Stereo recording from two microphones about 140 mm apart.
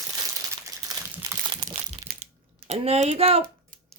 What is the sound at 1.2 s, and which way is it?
Crumpling, 35° right (ahead or behind).